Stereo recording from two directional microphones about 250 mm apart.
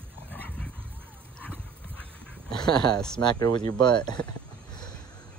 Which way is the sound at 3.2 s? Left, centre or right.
Centre.